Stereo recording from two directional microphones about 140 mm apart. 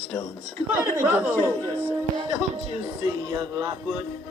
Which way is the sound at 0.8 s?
15° right (ahead or behind).